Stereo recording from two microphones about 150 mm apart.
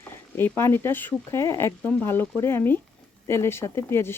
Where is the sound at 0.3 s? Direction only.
15° left (ahead or behind).